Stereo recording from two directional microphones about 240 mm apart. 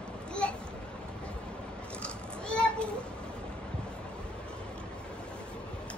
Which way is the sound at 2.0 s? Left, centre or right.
Centre.